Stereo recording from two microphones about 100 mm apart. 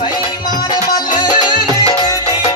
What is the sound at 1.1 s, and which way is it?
Music, 45° left (ahead or behind).